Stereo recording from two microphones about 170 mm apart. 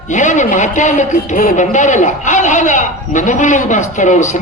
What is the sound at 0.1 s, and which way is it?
A man's voice, 45° left (ahead or behind).